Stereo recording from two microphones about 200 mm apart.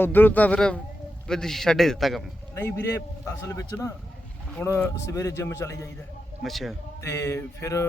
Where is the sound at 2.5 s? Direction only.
10° left (ahead or behind).